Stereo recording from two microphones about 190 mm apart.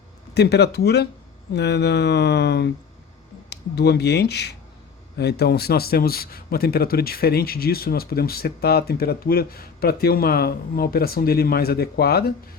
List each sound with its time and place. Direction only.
0.3 s mantra: 60° left (ahead or behind)
5.1 s a man's voice: 60° left (ahead or behind)